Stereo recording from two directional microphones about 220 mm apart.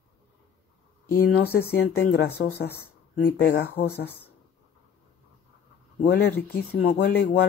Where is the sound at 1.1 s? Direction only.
45° left (ahead or behind).